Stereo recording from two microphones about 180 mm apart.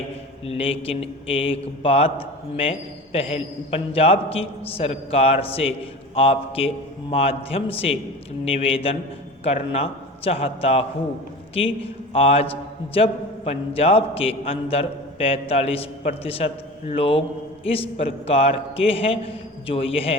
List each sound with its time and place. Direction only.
0.4 s a man's voice: 35° left (ahead or behind)
12.1 s a man's voice: 35° left (ahead or behind)